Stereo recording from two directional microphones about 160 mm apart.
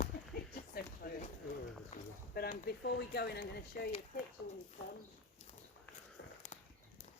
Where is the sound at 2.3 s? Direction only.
75° left (ahead or behind).